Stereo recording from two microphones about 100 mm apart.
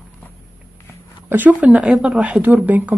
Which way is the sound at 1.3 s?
15° right (ahead or behind).